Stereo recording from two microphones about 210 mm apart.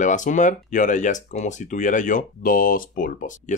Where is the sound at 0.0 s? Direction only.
35° left (ahead or behind).